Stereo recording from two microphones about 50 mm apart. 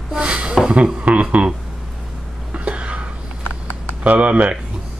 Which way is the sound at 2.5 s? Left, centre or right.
Right.